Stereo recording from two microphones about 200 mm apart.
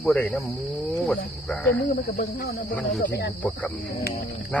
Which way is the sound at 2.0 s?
45° left (ahead or behind).